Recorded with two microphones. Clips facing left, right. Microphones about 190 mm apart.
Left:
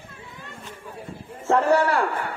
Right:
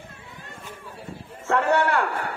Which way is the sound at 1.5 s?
35° left (ahead or behind).